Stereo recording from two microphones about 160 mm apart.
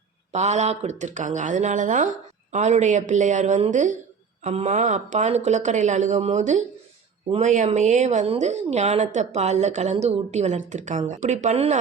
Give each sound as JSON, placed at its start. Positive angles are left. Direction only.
{"t": 0.3, "sound": "a woman's voice", "side_deg": -45}